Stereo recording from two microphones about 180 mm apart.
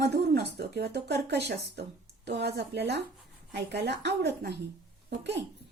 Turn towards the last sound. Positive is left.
turn(degrees=-75)  # may be behind; listen again after turning